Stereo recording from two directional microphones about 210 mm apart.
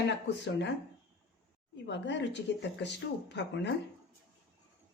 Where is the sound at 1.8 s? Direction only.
55° left (ahead or behind).